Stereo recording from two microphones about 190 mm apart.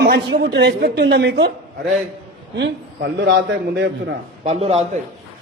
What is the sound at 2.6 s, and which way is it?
Speech, 65° right (ahead or behind).